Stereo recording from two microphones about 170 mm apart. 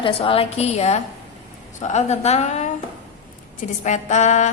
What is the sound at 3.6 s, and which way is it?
Speech, 45° left (ahead or behind).